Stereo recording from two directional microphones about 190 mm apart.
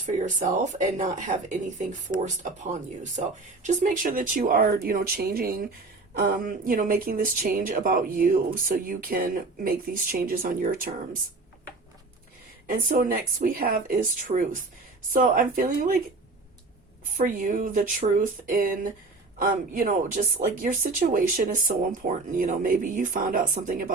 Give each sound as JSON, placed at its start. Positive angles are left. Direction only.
{"t": 0.0, "sound": "speech", "side_deg": -40}
{"t": 12.6, "sound": "speech", "side_deg": -45}
{"t": 17.2, "sound": "speech", "side_deg": -45}